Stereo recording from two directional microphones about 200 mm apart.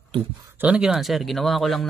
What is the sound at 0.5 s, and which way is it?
Speech, 5° right (ahead or behind).